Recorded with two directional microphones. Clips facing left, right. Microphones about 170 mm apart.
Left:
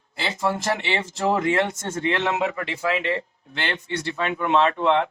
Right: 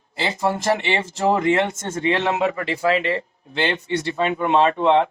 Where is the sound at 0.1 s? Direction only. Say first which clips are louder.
Right 3 dB; 20° right (ahead or behind).